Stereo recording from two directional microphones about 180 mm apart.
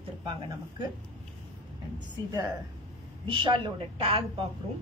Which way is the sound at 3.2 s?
25° right (ahead or behind).